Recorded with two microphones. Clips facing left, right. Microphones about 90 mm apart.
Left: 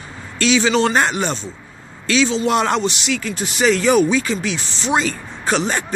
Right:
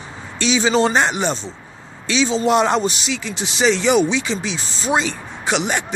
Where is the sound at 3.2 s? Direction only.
20° right (ahead or behind).